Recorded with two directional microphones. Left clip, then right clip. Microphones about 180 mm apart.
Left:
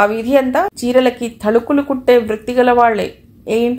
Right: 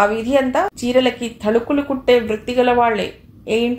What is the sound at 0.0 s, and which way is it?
A woman's voice, 30° left (ahead or behind).